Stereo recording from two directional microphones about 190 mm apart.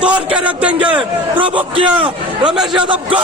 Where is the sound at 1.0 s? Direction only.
25° right (ahead or behind).